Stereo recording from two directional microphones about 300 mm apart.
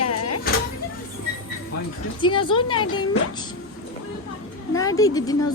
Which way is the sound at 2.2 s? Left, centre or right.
Centre.